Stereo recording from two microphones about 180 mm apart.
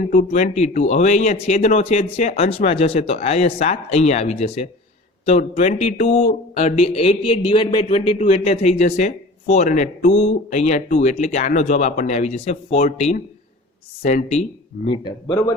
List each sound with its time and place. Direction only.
0.3 s speech: 40° left (ahead or behind)
14.8 s speech: 25° left (ahead or behind)